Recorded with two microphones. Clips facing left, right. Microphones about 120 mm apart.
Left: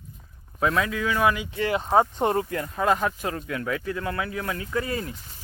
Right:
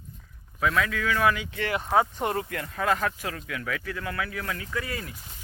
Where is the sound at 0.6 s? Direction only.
30° left (ahead or behind).